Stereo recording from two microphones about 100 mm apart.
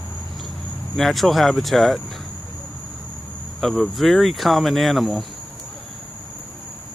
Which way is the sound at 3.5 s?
Centre (ahead or behind).